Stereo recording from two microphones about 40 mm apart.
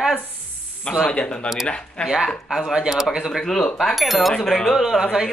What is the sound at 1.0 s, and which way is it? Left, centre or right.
Speech, left.